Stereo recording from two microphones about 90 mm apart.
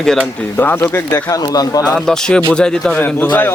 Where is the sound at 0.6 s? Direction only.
25° left (ahead or behind).